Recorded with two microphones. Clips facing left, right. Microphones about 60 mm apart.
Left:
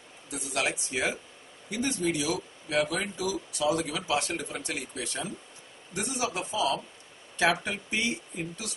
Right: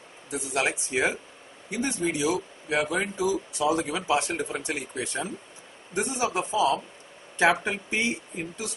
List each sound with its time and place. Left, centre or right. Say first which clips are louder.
0.3 s speech: right 3 dB; right